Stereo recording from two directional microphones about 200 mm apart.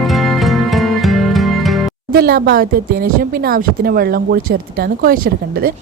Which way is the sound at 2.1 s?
50° right (ahead or behind).